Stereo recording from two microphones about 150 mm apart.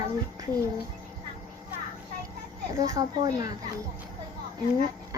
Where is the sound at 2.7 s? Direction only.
20° right (ahead or behind).